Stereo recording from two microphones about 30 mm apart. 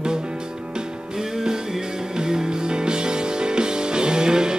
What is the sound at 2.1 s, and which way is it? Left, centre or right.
Music, right.